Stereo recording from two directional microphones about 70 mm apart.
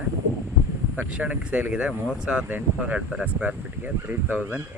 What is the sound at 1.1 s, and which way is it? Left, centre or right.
Speech, centre.